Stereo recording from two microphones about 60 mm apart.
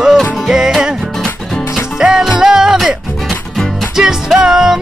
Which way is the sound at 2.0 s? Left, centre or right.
Centre.